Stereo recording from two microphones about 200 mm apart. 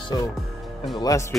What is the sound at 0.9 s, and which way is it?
Speech, 15° left (ahead or behind).